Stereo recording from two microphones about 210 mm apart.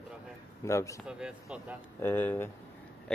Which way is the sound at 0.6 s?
15° left (ahead or behind).